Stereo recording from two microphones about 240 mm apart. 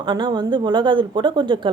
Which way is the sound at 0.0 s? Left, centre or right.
Centre.